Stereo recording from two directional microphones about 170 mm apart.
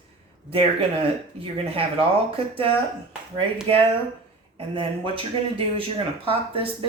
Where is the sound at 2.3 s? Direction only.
35° right (ahead or behind).